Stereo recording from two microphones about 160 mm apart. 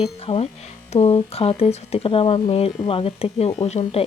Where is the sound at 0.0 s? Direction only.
35° left (ahead or behind).